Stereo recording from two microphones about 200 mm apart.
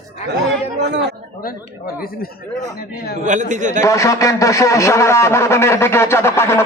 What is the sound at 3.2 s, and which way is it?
Speech, 40° right (ahead or behind).